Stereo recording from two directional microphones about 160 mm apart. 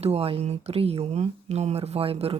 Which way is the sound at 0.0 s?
40° right (ahead or behind).